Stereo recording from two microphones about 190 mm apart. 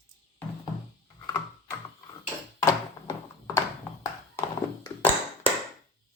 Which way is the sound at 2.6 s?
15° left (ahead or behind).